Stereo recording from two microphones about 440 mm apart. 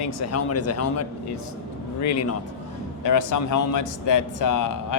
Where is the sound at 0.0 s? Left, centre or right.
Left.